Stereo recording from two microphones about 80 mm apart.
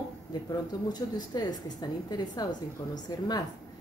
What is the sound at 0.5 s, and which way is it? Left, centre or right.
A woman's voice, left.